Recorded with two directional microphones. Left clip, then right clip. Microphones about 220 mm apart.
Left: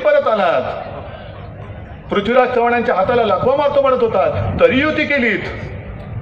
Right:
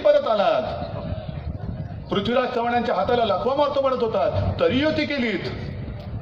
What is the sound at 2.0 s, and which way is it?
A man's voice, 50° right (ahead or behind).